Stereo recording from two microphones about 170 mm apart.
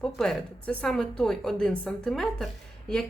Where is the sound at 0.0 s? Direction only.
5° left (ahead or behind).